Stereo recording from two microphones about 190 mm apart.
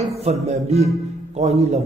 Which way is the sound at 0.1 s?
35° right (ahead or behind).